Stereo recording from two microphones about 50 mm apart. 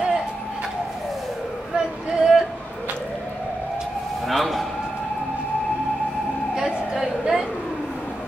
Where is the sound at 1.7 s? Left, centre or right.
Centre.